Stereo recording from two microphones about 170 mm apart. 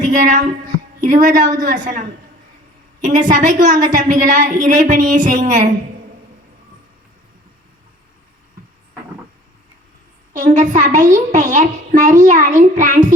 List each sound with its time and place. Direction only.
0.0 s a sound: 45° right (ahead or behind)
1.0 s a child's voice: 50° right (ahead or behind)
10.3 s a child's voice: 45° right (ahead or behind)